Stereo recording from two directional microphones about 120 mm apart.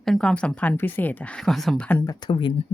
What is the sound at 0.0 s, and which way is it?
Speech, 5° left (ahead or behind).